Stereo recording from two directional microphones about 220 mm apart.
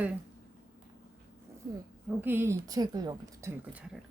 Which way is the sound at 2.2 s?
10° right (ahead or behind).